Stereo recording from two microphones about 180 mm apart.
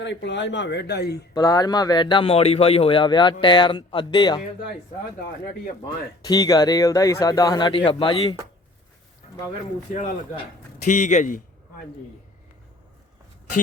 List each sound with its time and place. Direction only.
0.0 s speech: 80° left; by 1.3 s 65° left (ahead or behind)
1.3 s speech: 20° left (ahead or behind)
6.2 s speech: 20° left (ahead or behind)
9.9 s speech: 50° left (ahead or behind)